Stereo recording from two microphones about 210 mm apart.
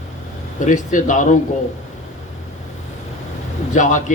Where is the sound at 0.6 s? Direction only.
35° left (ahead or behind).